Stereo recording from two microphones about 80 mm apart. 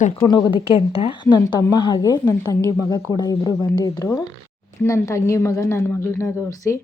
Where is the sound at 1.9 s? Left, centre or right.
Left.